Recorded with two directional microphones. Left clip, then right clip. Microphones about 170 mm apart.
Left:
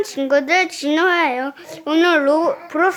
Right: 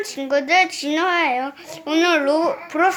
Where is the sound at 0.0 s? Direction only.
45° left (ahead or behind).